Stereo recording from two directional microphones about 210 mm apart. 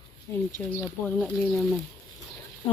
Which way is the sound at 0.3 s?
10° left (ahead or behind).